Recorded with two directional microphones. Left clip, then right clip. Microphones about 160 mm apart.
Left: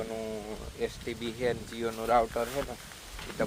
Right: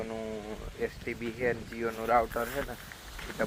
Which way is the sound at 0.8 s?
5° left (ahead or behind).